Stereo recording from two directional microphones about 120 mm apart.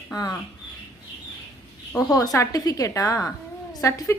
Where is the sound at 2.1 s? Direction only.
30° left (ahead or behind).